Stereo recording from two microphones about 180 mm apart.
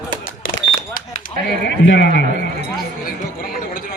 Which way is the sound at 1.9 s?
80° left.